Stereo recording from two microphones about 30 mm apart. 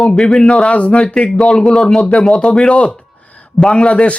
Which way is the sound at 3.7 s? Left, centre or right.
Left.